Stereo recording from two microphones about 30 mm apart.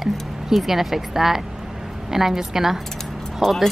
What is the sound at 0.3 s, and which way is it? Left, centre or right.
Speech, centre.